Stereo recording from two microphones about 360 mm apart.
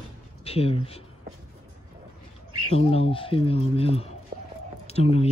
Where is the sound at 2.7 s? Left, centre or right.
Centre.